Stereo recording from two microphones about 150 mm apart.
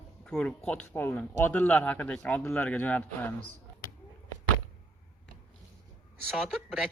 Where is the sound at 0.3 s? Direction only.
5° left (ahead or behind).